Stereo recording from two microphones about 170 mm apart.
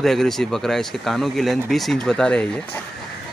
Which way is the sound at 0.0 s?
Centre (ahead or behind).